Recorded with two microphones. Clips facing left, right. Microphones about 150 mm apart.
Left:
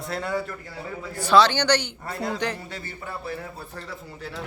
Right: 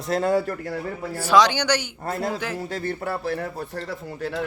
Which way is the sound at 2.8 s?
60° right (ahead or behind).